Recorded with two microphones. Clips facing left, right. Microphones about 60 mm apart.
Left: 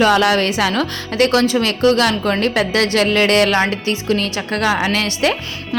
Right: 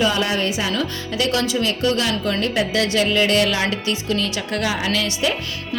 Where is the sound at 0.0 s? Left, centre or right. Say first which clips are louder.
Left 6 dB; left.